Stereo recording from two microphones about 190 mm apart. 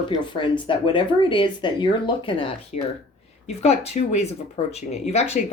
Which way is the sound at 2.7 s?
40° left (ahead or behind).